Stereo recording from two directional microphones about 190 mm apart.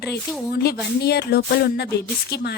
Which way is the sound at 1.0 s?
55° left (ahead or behind).